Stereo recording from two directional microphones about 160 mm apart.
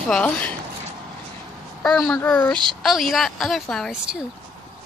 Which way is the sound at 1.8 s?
5° left (ahead or behind).